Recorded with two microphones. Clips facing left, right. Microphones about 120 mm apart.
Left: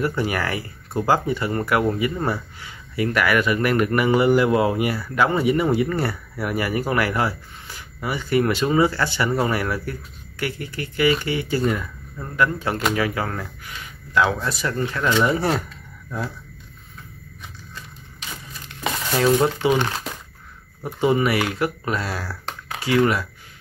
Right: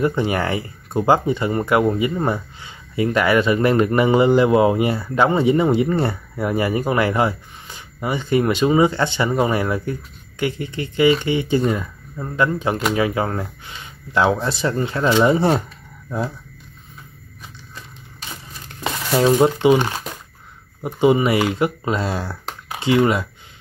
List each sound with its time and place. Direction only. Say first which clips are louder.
0.0 s speech: right 4 dB; 20° right (ahead or behind)
19.4 s speech: right 5 dB; 20° right (ahead or behind)